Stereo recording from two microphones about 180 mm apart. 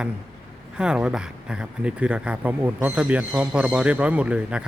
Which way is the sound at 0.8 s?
5° right (ahead or behind).